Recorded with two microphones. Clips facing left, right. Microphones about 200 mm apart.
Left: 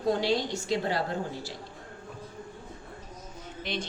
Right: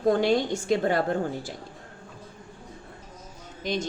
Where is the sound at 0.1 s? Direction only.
50° right (ahead or behind).